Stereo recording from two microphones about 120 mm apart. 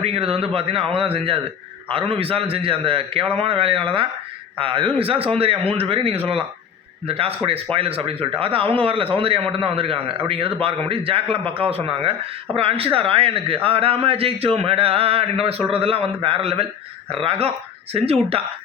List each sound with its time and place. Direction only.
0.0 s speech: 55° right (ahead or behind)